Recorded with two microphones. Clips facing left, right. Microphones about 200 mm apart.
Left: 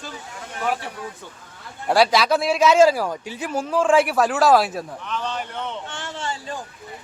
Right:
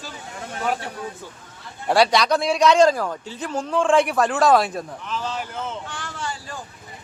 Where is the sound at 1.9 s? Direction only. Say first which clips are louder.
Even; centre (ahead or behind).